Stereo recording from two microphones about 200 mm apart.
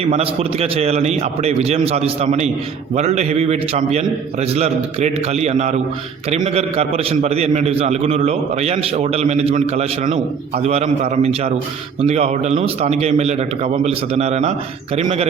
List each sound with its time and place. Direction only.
0.0 s a man's voice: 30° right (ahead or behind)